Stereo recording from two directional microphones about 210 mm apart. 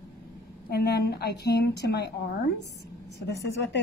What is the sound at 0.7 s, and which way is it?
A woman's voice, 50° left (ahead or behind).